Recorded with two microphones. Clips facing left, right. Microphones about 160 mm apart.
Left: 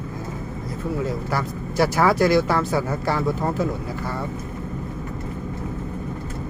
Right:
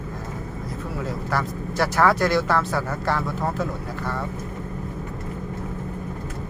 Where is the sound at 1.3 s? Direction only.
5° left (ahead or behind).